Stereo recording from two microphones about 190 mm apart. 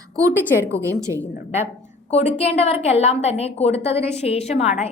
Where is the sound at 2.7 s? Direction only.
35° left (ahead or behind).